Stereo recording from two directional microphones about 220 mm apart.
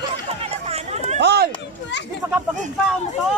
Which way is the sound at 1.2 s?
50° right (ahead or behind).